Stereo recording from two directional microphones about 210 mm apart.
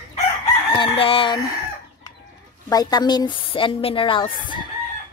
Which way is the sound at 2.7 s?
20° left (ahead or behind).